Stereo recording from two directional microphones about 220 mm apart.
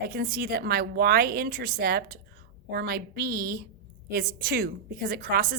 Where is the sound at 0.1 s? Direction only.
40° right (ahead or behind).